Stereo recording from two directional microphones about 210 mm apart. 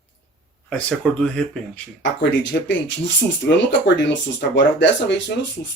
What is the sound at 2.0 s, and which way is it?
Speech, 55° left (ahead or behind).